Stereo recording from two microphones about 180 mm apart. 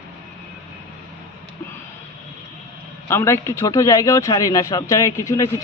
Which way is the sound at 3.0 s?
15° left (ahead or behind).